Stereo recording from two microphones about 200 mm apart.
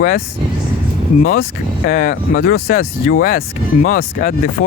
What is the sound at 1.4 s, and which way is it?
Speech, 50° left (ahead or behind).